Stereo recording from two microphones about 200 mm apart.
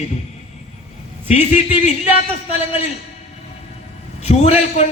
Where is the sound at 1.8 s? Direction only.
30° left (ahead or behind).